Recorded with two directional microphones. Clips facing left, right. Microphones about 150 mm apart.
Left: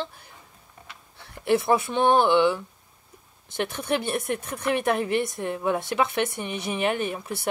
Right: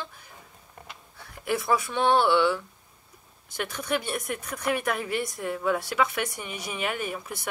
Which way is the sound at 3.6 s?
30° left (ahead or behind).